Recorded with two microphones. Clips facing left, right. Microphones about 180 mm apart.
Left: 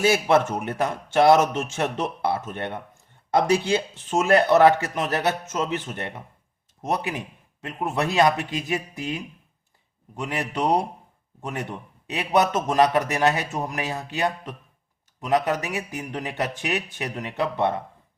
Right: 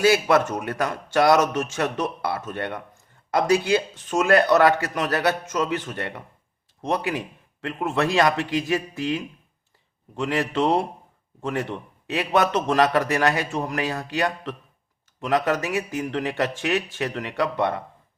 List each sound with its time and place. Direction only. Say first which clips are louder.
0.0 s a man's voice: right 1 dB; 25° left (ahead or behind)